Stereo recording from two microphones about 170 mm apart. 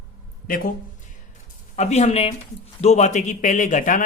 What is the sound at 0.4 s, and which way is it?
Speech, 55° left (ahead or behind).